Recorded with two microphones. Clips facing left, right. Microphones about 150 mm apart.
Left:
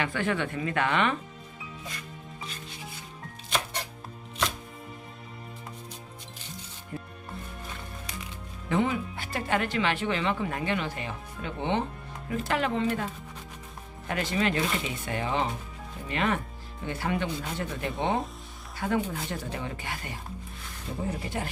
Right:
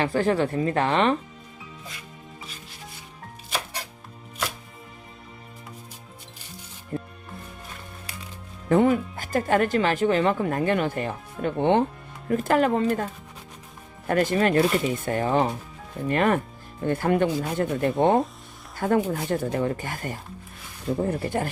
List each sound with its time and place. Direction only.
0.0 s speech: 35° right (ahead or behind)
3.5 s chopping: 5° right (ahead or behind)
6.9 s music: 40° right (ahead or behind)
8.7 s speech: 50° right (ahead or behind)
14.1 s speech: 45° right (ahead or behind)